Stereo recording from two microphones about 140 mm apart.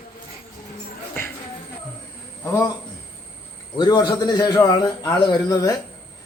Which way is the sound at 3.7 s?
30° left (ahead or behind).